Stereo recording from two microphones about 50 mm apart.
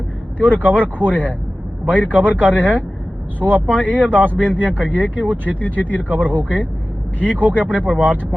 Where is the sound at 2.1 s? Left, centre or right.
Right.